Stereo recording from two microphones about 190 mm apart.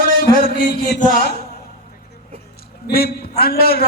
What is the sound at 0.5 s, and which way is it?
Speech, 45° left (ahead or behind).